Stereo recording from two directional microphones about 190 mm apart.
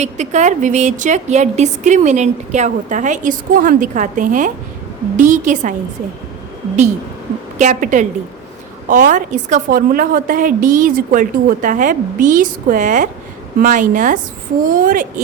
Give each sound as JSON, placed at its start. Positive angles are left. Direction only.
{"t": 0.0, "sound": "a woman's voice", "side_deg": -40}
{"t": 7.6, "sound": "a woman's voice", "side_deg": -40}